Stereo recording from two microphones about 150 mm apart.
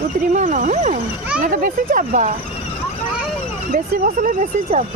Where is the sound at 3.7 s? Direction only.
60° right (ahead or behind).